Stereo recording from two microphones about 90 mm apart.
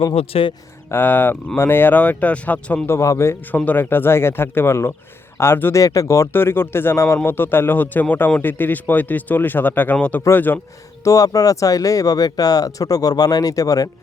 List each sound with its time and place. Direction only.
0.0 s speech: 80° left
0.9 s speech: 20° left (ahead or behind)
2.8 s a man's voice: 35° left (ahead or behind)
3.4 s speech: 15° left (ahead or behind)
5.8 s speech: 40° left (ahead or behind); by 10.6 s 20° left (ahead or behind)
11.0 s speech: 40° left (ahead or behind)